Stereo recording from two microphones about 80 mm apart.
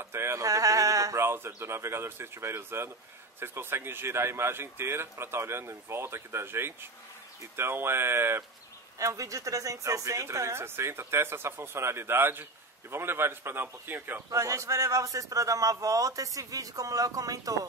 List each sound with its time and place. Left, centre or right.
0.0 s sheep: right
1.2 s a man's voice: right
8.9 s a man's voice: right
14.3 s a man's voice: right